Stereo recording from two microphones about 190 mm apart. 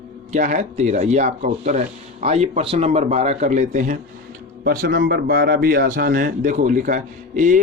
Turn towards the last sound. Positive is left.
turn(degrees=-45)  # may be behind; listen again after turning